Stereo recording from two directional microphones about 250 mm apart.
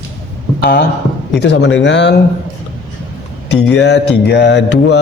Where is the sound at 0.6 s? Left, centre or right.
Left.